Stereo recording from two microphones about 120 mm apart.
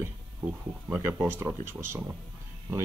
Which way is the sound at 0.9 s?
15° right (ahead or behind).